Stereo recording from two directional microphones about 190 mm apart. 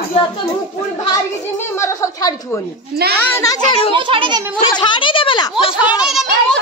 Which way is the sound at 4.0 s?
25° right (ahead or behind).